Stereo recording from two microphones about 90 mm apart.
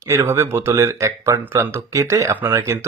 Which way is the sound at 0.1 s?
30° right (ahead or behind).